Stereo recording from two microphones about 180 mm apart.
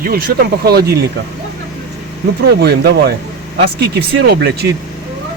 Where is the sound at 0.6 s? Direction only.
60° right (ahead or behind).